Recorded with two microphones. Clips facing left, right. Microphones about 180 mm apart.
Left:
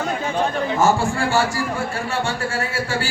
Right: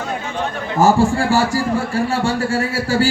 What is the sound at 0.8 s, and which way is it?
A man's voice, 35° right (ahead or behind).